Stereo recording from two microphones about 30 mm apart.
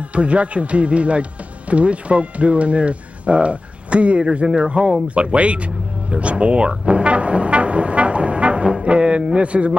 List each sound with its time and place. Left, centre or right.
0.1 s speech: right
4.4 s speech: centre
5.0 s speech: right
6.9 s music: right
8.8 s a sound: right